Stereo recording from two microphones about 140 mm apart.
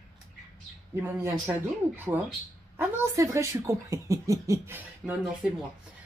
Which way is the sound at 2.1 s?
15° right (ahead or behind).